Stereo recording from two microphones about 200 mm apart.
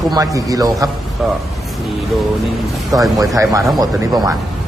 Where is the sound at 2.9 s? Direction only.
15° right (ahead or behind).